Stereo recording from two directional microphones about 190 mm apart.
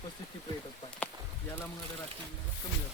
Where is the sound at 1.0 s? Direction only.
5° left (ahead or behind).